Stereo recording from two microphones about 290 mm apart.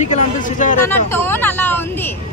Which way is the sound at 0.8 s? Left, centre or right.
Centre.